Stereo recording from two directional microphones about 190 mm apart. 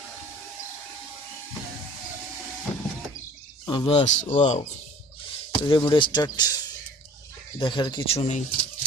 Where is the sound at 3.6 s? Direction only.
25° left (ahead or behind).